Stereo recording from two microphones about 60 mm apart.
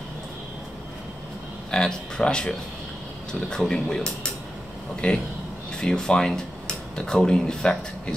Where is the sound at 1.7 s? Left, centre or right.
Centre.